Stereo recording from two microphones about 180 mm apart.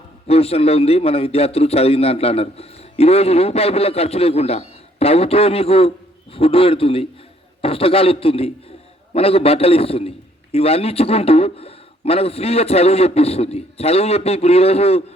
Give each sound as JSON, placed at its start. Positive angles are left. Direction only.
{"t": 0.3, "sound": "a man's voice", "side_deg": 35}